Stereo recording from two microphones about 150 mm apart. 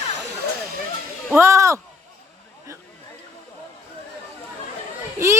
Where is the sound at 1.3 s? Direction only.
20° right (ahead or behind).